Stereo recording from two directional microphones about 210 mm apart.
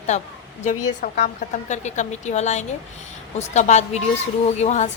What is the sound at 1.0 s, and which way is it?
A woman's voice, 40° left (ahead or behind).